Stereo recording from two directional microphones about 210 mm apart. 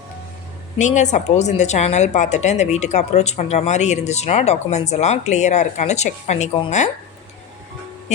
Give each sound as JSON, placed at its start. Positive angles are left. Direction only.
{"t": 0.8, "sound": "a woman's voice", "side_deg": 35}